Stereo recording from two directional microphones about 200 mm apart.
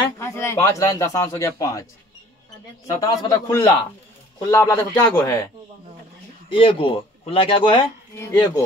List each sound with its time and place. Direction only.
0.2 s speech: 15° left (ahead or behind)
2.9 s speech: 15° left (ahead or behind)
6.5 s a man's voice: 25° left (ahead or behind)
8.2 s speech: 15° left (ahead or behind)